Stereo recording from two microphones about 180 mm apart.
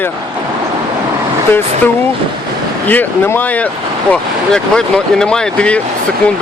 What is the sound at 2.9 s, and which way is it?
Speech, 10° left (ahead or behind).